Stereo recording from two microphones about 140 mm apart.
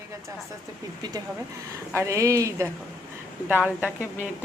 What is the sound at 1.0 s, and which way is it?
A woman's voice, 30° right (ahead or behind).